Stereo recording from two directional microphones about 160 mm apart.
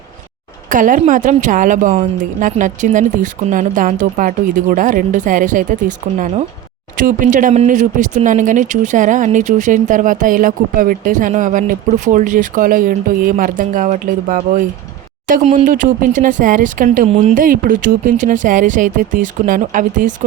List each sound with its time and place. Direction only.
0.7 s speech: 55° right (ahead or behind)